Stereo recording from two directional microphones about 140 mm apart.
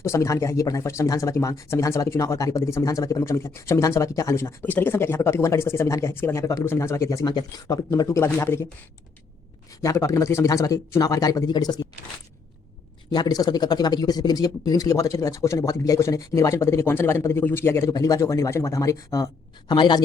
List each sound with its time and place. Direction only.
0.0 s speech: 20° left (ahead or behind)
9.8 s speech: 25° left (ahead or behind)
13.1 s speech: 30° left (ahead or behind)